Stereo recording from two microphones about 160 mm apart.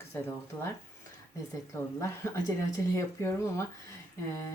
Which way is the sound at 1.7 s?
15° left (ahead or behind).